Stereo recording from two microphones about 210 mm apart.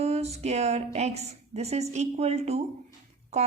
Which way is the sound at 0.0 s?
30° right (ahead or behind).